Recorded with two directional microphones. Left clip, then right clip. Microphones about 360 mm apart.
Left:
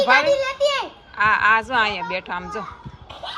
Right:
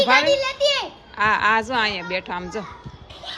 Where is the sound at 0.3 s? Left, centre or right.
Left.